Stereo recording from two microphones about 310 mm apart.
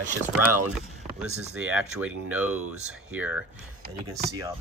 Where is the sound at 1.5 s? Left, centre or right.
Centre.